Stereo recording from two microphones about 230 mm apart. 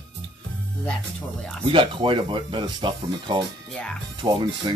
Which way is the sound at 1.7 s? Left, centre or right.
Right.